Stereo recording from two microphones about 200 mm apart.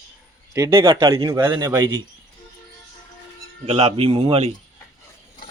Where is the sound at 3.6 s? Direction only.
30° right (ahead or behind).